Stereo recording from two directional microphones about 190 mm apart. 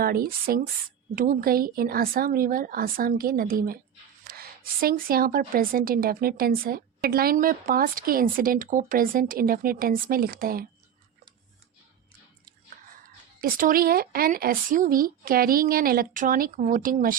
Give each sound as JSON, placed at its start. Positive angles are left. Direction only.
{"t": 0.0, "sound": "a woman's voice", "side_deg": -50}
{"t": 13.4, "sound": "a woman's voice", "side_deg": -50}